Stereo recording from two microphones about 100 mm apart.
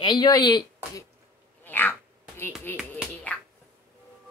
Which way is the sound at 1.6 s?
20° left (ahead or behind).